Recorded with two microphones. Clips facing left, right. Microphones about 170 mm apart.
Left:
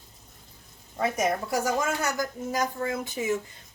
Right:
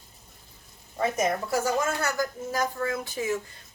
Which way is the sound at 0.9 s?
10° left (ahead or behind).